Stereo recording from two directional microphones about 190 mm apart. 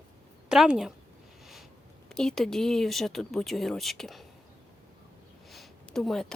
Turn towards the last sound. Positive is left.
turn(degrees=5)  # may be behind; listen again after turning